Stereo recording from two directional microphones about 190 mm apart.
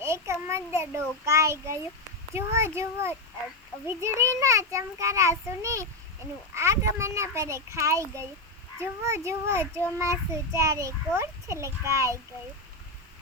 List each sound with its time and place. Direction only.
0.0 s a child's voice: 15° right (ahead or behind)